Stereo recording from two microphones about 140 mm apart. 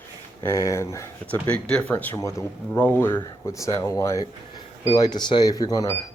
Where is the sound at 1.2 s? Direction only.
10° left (ahead or behind); by 5.9 s 25° left (ahead or behind).